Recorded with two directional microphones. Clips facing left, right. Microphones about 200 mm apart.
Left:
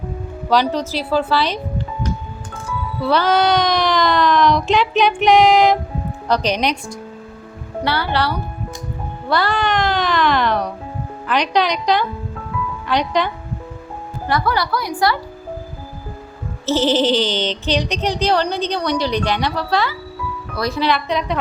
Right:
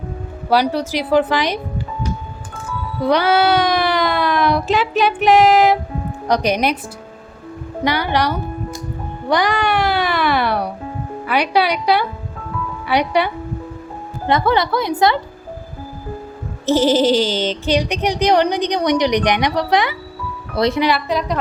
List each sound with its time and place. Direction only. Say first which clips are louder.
0.5 s speech: right 1 dB; 10° right (ahead or behind)
3.0 s speech: right 1 dB; 15° right (ahead or behind)
7.9 s speech: right 2 dB; 15° right (ahead or behind)
14.3 s a woman's voice: right 3 dB; 20° right (ahead or behind)
16.6 s a woman's voice: right 2 dB; 10° right (ahead or behind)
20.8 s a woman's voice: right 1 dB; 5° right (ahead or behind)